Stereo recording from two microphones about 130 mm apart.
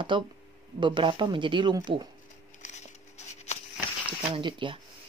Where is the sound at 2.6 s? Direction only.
60° left (ahead or behind).